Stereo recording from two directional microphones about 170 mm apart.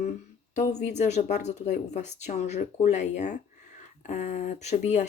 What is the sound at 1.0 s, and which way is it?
Speech, 40° left (ahead or behind).